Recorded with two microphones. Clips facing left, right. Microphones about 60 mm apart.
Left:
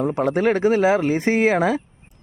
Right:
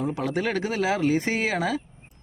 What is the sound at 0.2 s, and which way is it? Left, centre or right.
Speech, left.